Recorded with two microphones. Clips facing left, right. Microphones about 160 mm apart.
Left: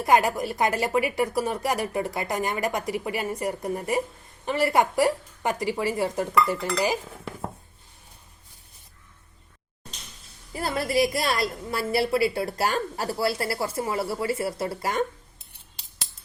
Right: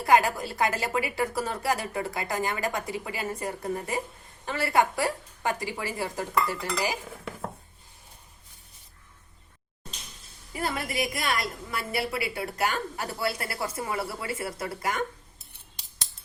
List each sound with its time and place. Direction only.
0.0 s a woman's voice: 20° left (ahead or behind)
10.5 s a woman's voice: 35° left (ahead or behind)